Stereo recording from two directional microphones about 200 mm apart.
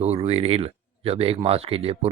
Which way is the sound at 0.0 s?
30° right (ahead or behind).